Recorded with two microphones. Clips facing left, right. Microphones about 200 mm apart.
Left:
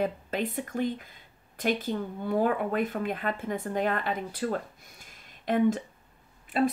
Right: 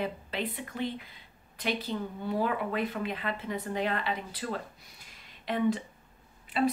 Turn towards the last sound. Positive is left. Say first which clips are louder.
# left 2 dB
turn(degrees=45)  # may be behind; listen again after turning